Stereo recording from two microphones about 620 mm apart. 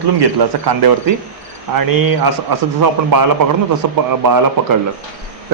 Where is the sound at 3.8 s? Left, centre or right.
Right.